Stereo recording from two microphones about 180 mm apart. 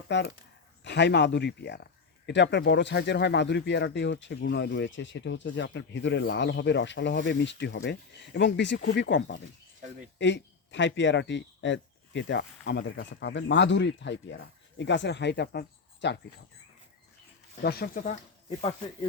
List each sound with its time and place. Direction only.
0.1 s speech: 75° left (ahead or behind)
17.6 s speech: 60° left (ahead or behind)